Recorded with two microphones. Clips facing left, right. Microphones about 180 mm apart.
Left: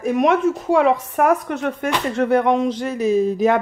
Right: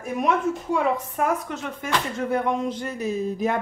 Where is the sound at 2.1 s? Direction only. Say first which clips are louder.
Left 10 dB; 80° left.